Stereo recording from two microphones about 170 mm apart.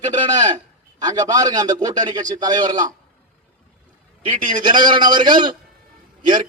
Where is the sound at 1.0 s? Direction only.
20° right (ahead or behind).